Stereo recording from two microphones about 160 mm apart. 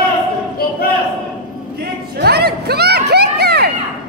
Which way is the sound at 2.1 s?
90° right.